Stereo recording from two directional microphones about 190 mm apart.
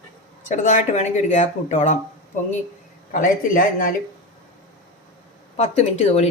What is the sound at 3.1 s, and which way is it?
Speech, 45° left (ahead or behind).